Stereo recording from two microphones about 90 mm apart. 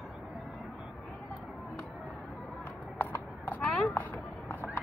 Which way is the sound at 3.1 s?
20° left (ahead or behind).